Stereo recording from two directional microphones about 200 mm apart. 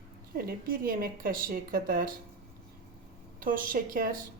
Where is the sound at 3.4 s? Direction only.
45° right (ahead or behind).